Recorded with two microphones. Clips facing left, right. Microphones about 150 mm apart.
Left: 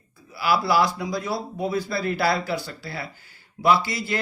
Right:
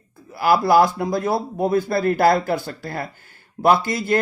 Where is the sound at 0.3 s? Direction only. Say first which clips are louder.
Right 6 dB; 50° right (ahead or behind).